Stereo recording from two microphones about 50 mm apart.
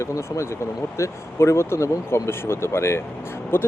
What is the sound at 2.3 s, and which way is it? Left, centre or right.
Speech, left.